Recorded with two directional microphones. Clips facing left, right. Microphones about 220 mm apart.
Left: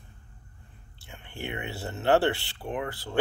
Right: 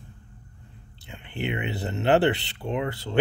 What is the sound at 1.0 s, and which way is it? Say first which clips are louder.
Speech: right 6 dB; 20° right (ahead or behind).